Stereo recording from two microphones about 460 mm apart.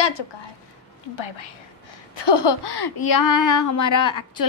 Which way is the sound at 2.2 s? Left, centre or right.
Left.